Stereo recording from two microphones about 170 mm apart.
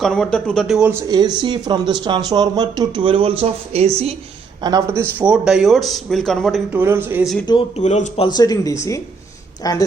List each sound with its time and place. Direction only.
0.0 s speech: 5° left (ahead or behind)
1.0 s speech: 25° right (ahead or behind)
4.6 s speech: 20° right (ahead or behind); by 6.6 s centre (ahead or behind)
6.7 s speech: 15° right (ahead or behind)
7.8 s speech: 40° left (ahead or behind); by 9.8 s 20° left (ahead or behind)